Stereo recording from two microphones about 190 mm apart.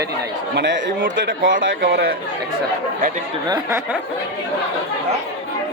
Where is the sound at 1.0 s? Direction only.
45° right (ahead or behind).